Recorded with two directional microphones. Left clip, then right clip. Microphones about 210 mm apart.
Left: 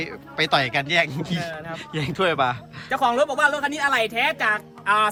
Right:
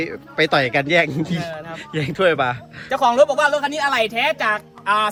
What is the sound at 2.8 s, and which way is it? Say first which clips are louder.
A woman's voice: right 5 dB; 10° right (ahead or behind).